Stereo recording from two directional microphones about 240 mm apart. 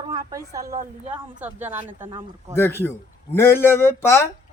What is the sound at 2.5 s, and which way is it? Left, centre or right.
Speech, centre.